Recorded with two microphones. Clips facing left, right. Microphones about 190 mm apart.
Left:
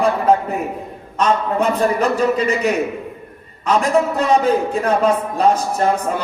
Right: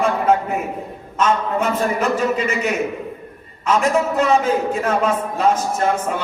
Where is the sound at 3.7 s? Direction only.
35° left (ahead or behind).